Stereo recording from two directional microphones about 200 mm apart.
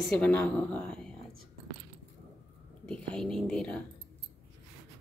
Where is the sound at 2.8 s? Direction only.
5° left (ahead or behind).